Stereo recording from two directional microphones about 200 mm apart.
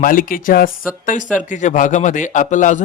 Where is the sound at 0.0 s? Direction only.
45° left (ahead or behind).